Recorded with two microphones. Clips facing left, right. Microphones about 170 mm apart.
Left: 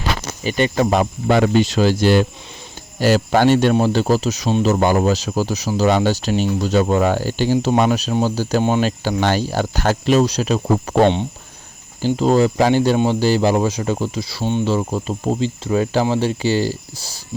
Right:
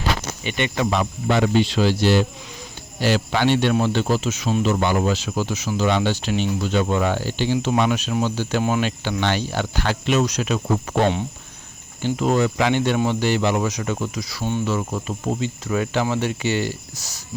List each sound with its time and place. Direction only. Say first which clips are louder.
0.4 s speech: left 6 dB; 35° left (ahead or behind)